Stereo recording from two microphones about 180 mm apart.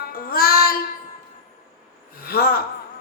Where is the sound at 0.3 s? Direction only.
55° left (ahead or behind).